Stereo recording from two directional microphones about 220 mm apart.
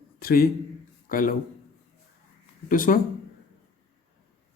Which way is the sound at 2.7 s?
40° left (ahead or behind).